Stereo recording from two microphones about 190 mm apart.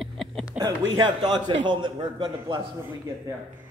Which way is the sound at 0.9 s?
25° right (ahead or behind).